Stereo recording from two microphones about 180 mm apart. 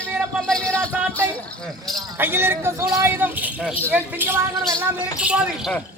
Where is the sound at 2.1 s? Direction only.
10° right (ahead or behind).